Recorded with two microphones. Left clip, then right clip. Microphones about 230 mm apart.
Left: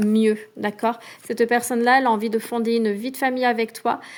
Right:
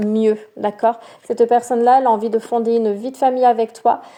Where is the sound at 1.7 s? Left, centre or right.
Left.